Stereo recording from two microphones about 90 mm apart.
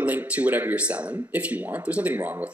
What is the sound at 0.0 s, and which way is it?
Speech, 20° right (ahead or behind).